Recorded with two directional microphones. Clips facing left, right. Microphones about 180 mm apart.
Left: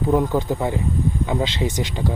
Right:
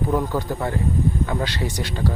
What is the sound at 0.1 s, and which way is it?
Speech, 20° left (ahead or behind).